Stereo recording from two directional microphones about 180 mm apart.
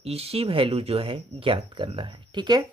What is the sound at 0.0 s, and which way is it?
Speech, 35° right (ahead or behind).